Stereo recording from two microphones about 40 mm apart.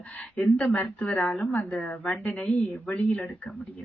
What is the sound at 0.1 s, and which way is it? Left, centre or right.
Speech, left.